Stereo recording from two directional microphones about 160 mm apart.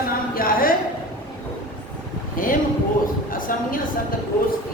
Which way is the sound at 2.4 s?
60° left (ahead or behind).